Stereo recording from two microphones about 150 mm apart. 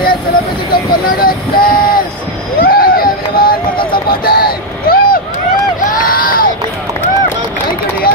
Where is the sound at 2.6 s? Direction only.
80° left.